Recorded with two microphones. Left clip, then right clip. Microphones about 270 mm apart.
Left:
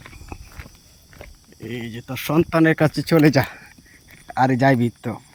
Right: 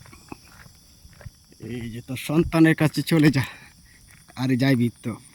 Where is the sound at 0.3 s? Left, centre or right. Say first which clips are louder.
Left 1 dB; centre.